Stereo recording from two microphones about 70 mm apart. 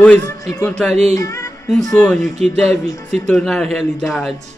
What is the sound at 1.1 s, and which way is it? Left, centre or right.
Music, left.